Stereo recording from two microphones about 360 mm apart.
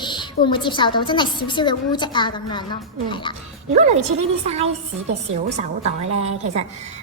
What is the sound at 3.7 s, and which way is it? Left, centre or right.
A woman's voice, centre.